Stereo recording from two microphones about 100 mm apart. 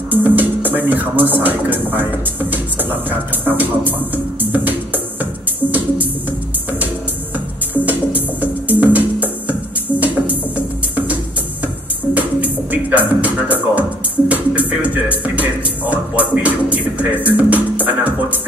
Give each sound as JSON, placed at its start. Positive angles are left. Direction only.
{"t": 0.1, "sound": "speech", "side_deg": -15}
{"t": 2.5, "sound": "a sound", "side_deg": -20}
{"t": 7.8, "sound": "music", "side_deg": -15}